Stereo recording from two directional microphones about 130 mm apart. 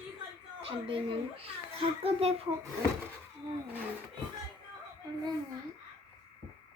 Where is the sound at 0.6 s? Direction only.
45° right (ahead or behind).